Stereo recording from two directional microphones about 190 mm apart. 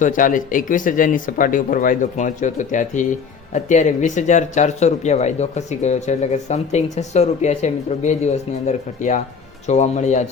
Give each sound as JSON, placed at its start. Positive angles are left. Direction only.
{"t": 0.0, "sound": "speech", "side_deg": 45}